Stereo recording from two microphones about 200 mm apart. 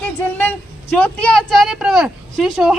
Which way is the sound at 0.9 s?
5° left (ahead or behind).